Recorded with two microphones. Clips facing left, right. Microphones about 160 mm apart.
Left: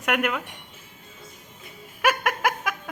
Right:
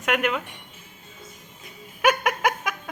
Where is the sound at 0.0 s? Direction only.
5° left (ahead or behind).